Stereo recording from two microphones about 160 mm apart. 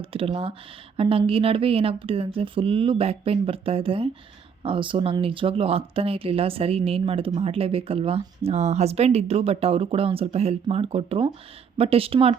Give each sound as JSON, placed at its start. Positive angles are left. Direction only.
{"t": 0.0, "sound": "speech", "side_deg": -35}